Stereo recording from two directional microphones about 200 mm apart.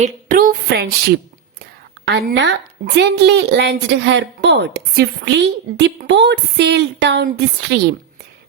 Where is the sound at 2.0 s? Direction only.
60° right (ahead or behind).